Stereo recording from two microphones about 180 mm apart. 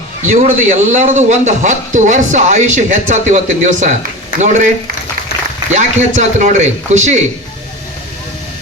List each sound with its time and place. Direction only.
0.3 s a man's voice: 40° right (ahead or behind)
5.3 s a sound: 65° left (ahead or behind)
5.7 s a man's voice: 40° right (ahead or behind)